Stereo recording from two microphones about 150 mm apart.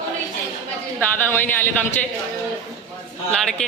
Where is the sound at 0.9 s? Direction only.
15° left (ahead or behind).